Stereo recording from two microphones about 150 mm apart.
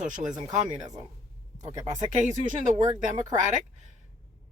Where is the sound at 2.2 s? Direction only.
55° right (ahead or behind).